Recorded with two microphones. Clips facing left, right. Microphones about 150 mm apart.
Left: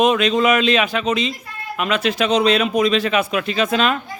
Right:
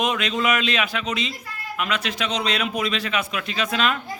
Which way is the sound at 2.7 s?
35° left (ahead or behind).